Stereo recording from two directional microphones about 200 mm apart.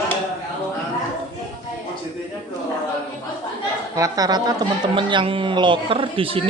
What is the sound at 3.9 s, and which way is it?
Speech, 20° right (ahead or behind).